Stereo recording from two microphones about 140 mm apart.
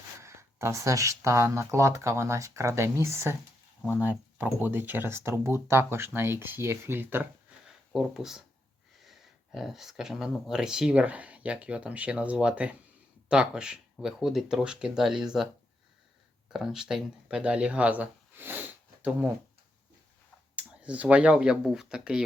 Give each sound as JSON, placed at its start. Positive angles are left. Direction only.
{"t": 0.2, "sound": "speech", "side_deg": -20}
{"t": 7.9, "sound": "speech", "side_deg": -5}
{"t": 16.5, "sound": "speech", "side_deg": -5}
{"t": 20.6, "sound": "speech", "side_deg": -10}